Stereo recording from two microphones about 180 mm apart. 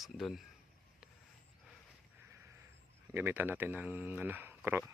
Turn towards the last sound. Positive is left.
turn(degrees=-15)  # may be behind; listen again after turning